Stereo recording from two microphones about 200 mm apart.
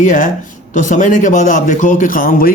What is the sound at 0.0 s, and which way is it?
A man's voice, 40° left (ahead or behind).